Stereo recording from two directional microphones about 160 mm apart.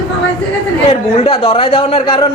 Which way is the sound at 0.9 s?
35° left (ahead or behind).